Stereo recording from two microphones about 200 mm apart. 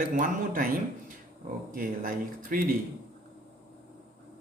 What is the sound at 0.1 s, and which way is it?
Speech, 45° right (ahead or behind).